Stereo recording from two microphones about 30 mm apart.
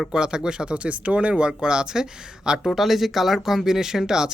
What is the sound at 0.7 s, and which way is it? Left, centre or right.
Speech, right.